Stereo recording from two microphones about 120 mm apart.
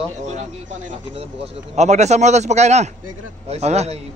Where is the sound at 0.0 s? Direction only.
70° right (ahead or behind).